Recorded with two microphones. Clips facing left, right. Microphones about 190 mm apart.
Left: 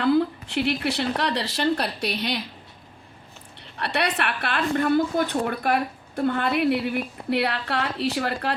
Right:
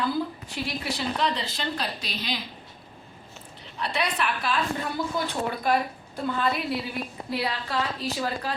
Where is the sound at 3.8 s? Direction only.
65° left (ahead or behind).